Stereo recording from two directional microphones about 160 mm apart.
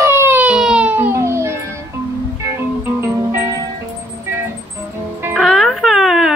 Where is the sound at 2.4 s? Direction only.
15° right (ahead or behind).